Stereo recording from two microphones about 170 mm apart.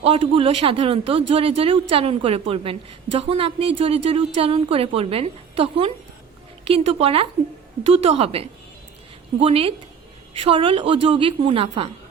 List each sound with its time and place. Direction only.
0.0 s a woman's voice: 35° right (ahead or behind)